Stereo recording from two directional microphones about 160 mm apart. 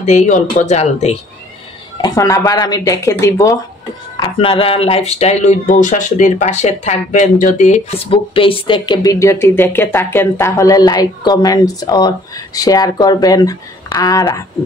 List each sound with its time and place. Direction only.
0.0 s speech: 45° left (ahead or behind)
2.0 s speech: 20° left (ahead or behind)
4.2 s speech: 35° left (ahead or behind)